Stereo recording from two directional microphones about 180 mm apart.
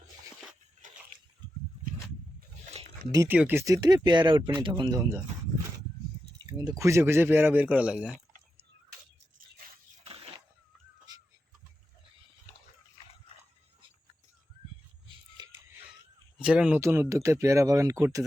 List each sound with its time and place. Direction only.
0.8 s a sound: 45° right (ahead or behind)
3.1 s speech: 15° right (ahead or behind)
6.4 s speech: 20° right (ahead or behind); by 8.1 s 5° right (ahead or behind)
15.4 s music: 25° right (ahead or behind)
16.4 s speech: 5° right (ahead or behind)